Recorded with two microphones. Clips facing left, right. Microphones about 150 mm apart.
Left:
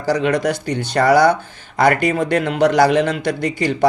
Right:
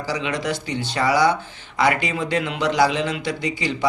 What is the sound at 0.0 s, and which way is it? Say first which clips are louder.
A man's voice: left 8 dB; 50° left (ahead or behind).